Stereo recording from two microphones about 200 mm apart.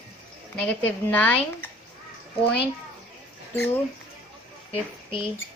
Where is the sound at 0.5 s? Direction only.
5° left (ahead or behind).